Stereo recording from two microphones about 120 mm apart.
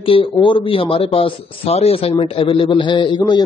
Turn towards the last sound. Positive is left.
turn(degrees=35)  # may be behind; listen again after turning